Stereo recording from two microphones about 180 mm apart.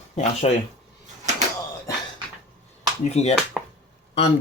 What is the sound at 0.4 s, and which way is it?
Speech, 30° left (ahead or behind).